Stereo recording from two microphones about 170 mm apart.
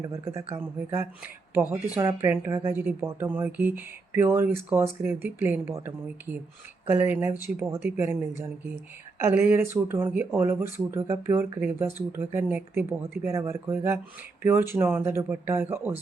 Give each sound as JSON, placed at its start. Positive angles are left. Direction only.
{"t": 0.0, "sound": "speech", "side_deg": -15}